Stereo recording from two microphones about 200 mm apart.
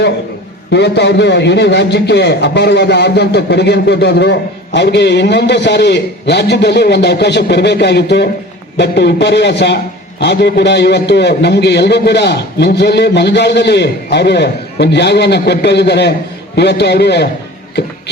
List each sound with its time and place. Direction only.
0.7 s a man's voice: 60° left (ahead or behind)